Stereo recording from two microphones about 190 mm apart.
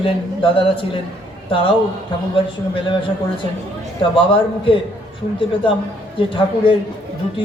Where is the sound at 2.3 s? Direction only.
25° left (ahead or behind).